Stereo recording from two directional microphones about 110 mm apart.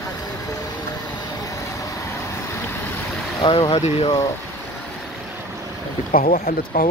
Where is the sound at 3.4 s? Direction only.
50° left (ahead or behind).